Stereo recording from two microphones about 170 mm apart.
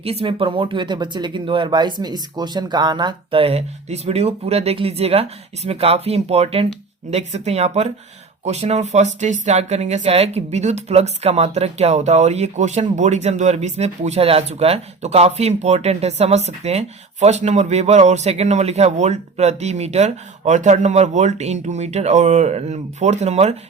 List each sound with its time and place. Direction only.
0.0 s speech: 35° right (ahead or behind)